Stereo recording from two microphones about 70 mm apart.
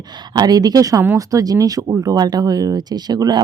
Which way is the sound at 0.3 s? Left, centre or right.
Right.